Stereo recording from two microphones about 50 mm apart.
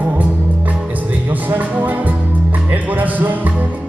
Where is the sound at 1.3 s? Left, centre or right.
Right.